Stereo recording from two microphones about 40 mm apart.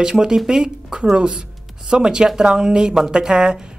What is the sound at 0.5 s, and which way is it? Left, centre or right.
Speech, centre.